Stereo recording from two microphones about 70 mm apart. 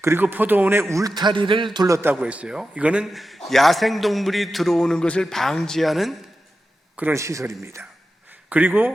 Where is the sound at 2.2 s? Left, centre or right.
Centre.